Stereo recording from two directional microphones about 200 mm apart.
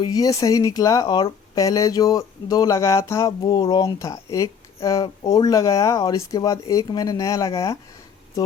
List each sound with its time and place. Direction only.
0.0 s speech: 20° left (ahead or behind)